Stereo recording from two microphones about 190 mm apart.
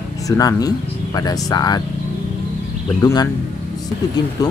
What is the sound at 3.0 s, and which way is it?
Speech, 20° left (ahead or behind).